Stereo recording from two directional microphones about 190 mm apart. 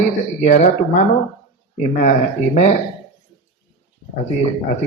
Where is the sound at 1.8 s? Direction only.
40° left (ahead or behind).